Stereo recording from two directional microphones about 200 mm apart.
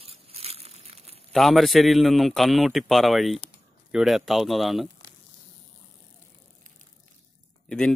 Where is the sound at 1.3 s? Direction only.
Centre (ahead or behind).